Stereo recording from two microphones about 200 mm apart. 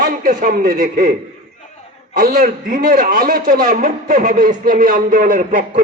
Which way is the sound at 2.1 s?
40° right (ahead or behind).